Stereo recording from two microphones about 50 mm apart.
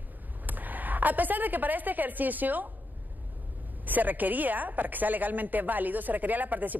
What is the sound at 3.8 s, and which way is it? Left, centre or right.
A woman's voice, right.